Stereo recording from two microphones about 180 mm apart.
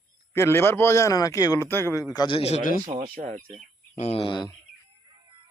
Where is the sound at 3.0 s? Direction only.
50° right (ahead or behind).